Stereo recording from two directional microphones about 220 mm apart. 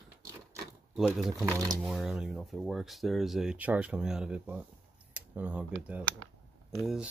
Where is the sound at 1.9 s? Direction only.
Centre (ahead or behind).